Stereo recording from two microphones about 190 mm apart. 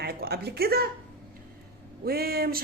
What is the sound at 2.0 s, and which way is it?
Speech, 55° right (ahead or behind).